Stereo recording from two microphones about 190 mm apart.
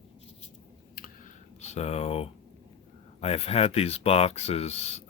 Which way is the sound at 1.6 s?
35° left (ahead or behind).